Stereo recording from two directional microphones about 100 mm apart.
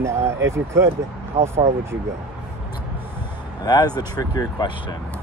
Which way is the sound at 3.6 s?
40° left (ahead or behind).